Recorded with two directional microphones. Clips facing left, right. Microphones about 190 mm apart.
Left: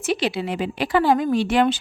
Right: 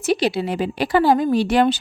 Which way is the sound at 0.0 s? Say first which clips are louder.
Right 3 dB; 40° right (ahead or behind).